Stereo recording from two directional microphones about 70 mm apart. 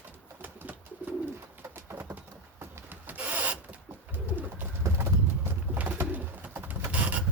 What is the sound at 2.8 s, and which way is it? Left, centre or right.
Rub, right.